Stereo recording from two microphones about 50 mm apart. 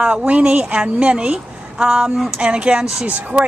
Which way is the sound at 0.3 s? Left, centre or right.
Right.